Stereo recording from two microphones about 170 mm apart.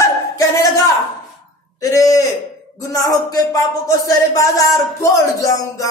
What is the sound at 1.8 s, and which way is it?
A man's voice, 20° left (ahead or behind).